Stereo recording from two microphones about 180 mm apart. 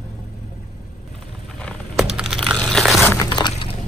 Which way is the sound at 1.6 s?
Centre (ahead or behind).